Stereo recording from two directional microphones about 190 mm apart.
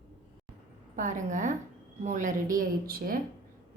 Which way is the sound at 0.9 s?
40° right (ahead or behind).